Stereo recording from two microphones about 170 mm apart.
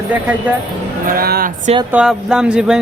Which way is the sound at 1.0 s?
60° right (ahead or behind).